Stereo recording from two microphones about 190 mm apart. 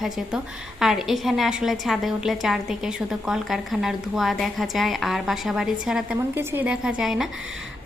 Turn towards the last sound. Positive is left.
turn(degrees=0)  # may be behind; listen again after turning